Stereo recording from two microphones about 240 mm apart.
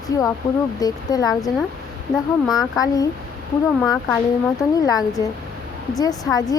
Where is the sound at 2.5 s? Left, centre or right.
Centre.